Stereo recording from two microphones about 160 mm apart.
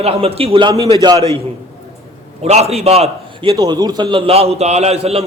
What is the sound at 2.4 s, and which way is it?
A man's voice, 40° right (ahead or behind).